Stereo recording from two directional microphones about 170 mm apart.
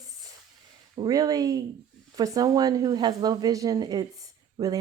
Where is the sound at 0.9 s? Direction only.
25° right (ahead or behind).